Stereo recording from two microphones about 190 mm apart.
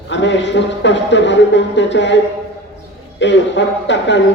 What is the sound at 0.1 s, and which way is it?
Speech, 70° left (ahead or behind).